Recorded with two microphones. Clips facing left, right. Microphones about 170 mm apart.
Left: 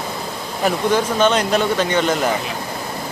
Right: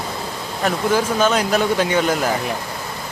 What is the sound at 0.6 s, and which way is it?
Speech, 5° right (ahead or behind).